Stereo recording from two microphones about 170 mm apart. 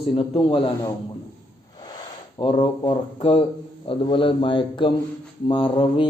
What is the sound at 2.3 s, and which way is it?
A man's voice, 30° left (ahead or behind).